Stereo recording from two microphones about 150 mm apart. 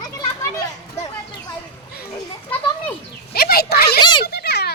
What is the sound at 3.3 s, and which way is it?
Speech, 90° left.